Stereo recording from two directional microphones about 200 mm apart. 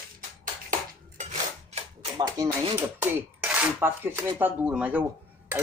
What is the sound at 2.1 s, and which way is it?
Speech, 20° right (ahead or behind).